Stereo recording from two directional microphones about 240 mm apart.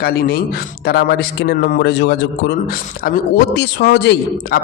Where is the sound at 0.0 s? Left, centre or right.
Left.